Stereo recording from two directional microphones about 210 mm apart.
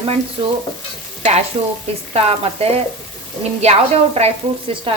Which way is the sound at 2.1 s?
30° right (ahead or behind).